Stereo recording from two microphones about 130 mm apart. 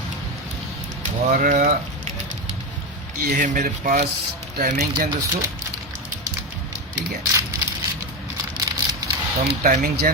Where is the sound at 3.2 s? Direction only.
85° right.